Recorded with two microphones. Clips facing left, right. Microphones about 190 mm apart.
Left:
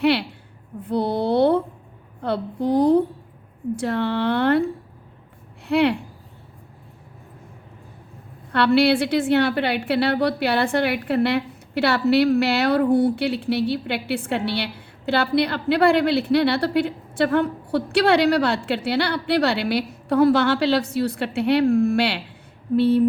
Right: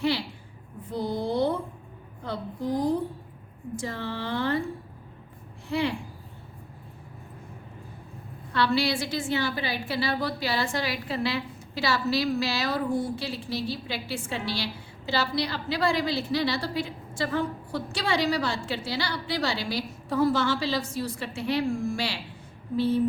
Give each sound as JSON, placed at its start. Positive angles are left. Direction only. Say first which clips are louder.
{"t": 0.0, "sound": "a woman's voice", "louder": "left 7 dB", "side_deg": 65}
{"t": 5.6, "sound": "speech", "louder": "left 9 dB", "side_deg": 65}
{"t": 8.5, "sound": "a woman's voice", "louder": "left 8 dB", "side_deg": 65}